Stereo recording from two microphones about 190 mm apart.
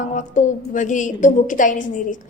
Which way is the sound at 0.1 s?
40° left (ahead or behind).